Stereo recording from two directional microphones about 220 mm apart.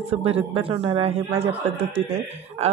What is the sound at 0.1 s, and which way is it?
A man's voice, 25° right (ahead or behind).